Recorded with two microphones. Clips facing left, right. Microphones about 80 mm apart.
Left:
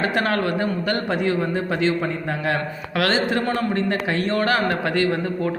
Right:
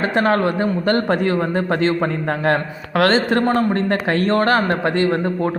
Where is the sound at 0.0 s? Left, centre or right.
Right.